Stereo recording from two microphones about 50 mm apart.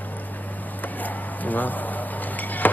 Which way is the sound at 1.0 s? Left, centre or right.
Left.